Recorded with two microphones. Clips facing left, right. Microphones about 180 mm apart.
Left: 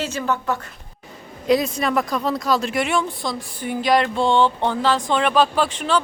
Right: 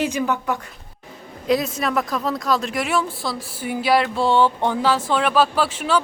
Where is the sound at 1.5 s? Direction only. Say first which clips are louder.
Left 2 dB; centre (ahead or behind).